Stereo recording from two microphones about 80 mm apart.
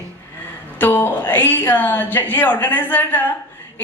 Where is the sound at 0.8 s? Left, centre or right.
Left.